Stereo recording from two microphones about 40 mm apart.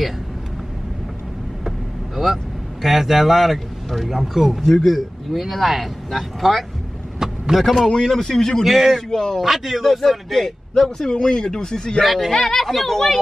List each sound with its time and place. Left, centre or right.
2.8 s speech: centre
7.2 s vehicle: centre
7.9 s speech: centre
8.6 s a man's voice: centre
8.9 s speech: centre
9.4 s speech: centre
11.1 s speech: left
12.0 s speech: centre